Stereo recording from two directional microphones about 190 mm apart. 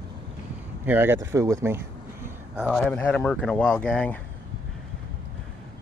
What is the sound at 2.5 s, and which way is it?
Speech, centre (ahead or behind).